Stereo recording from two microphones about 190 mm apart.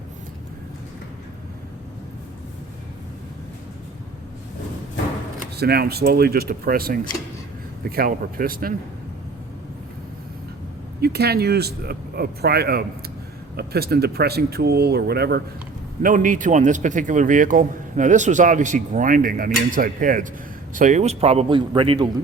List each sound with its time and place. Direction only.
5.5 s a man's voice: 55° right (ahead or behind)
11.0 s speech: 60° right (ahead or behind)
16.0 s a man's voice: 45° right (ahead or behind); by 22.1 s 25° right (ahead or behind)